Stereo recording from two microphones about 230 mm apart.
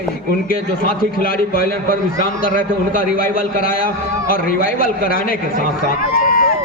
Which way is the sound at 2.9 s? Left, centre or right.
Left.